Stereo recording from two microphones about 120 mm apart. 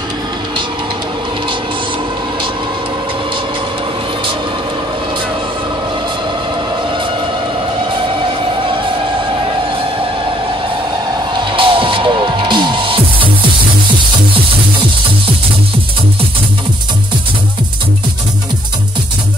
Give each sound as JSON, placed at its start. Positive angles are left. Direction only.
{"t": 11.3, "sound": "music", "side_deg": -45}